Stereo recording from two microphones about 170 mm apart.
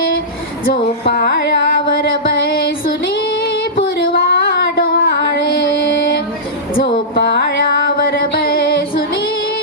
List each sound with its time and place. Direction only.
0.7 s music: 70° left (ahead or behind)
2.2 s a sound: 65° left (ahead or behind)
3.9 s female singing: 75° left (ahead or behind)
7.2 s music: 80° left
8.2 s music: 60° left (ahead or behind)